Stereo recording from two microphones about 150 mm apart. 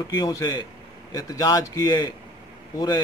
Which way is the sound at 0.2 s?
25° left (ahead or behind).